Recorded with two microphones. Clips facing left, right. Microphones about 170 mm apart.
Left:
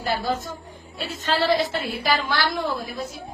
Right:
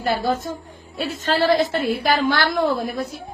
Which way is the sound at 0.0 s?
55° right (ahead or behind).